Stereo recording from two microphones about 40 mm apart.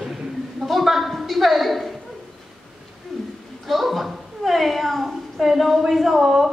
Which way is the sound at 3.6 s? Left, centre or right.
Centre.